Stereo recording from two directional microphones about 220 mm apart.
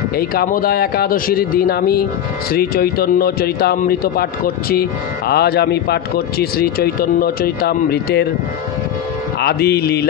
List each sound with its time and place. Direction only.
0.2 s a man's voice: 45° left (ahead or behind)
9.4 s a man's voice: 45° left (ahead or behind)